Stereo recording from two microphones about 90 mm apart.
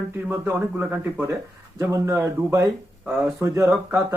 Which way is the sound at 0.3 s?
20° right (ahead or behind).